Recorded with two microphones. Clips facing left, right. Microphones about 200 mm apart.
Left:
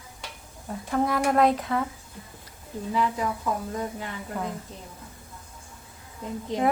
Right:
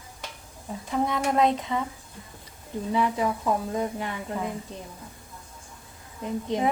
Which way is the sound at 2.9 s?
20° right (ahead or behind).